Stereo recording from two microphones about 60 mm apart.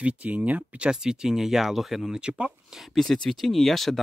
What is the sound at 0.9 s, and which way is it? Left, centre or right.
Speech, centre.